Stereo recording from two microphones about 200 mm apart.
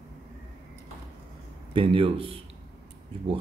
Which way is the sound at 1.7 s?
25° right (ahead or behind).